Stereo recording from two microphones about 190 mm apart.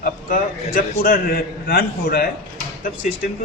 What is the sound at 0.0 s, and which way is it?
A man's voice, 50° left (ahead or behind).